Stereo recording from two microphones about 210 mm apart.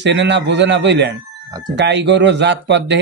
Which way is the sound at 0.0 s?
60° right (ahead or behind).